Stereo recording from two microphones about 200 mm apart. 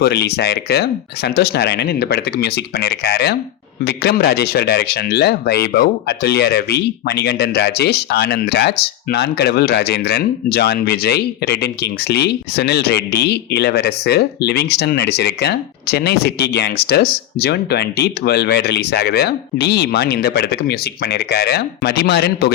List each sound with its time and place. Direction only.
0.0 s speech: 55° left (ahead or behind)